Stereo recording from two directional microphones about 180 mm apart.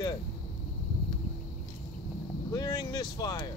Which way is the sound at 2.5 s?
20° left (ahead or behind).